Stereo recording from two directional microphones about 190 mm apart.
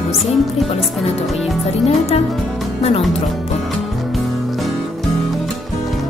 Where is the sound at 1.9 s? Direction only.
35° left (ahead or behind).